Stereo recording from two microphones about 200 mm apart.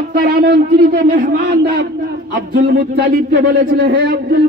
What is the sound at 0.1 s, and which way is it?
A man's voice, 50° right (ahead or behind).